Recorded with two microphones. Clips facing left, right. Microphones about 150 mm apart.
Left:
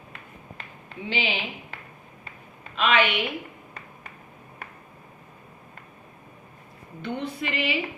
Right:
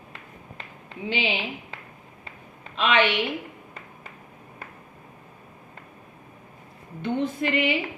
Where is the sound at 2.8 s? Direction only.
25° right (ahead or behind).